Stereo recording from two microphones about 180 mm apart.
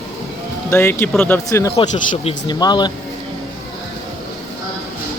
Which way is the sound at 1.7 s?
35° left (ahead or behind).